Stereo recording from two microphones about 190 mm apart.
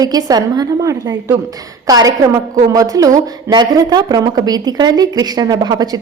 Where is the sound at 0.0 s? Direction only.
20° right (ahead or behind).